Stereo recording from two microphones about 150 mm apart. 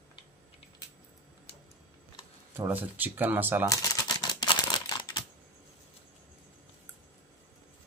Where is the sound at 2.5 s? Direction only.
15° right (ahead or behind).